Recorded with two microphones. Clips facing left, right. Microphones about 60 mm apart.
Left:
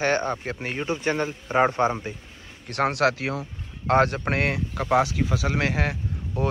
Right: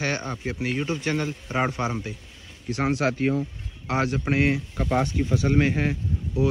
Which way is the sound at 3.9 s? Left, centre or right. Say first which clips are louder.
Left 4 dB; left.